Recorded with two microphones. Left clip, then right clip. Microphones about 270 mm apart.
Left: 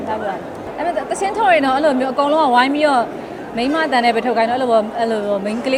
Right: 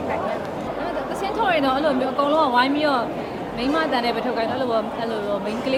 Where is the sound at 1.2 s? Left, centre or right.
Left.